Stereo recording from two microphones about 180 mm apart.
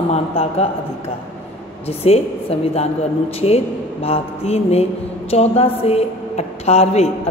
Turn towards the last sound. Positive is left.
turn(degrees=35)  # may be behind; listen again after turning